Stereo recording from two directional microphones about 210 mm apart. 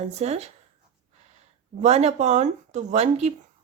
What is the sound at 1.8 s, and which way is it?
Speech, 30° right (ahead or behind).